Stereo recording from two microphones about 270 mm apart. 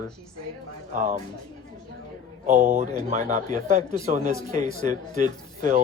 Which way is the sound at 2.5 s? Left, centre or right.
Right.